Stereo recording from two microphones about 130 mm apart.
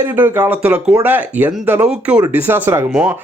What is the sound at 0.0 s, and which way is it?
Speech, 15° right (ahead or behind).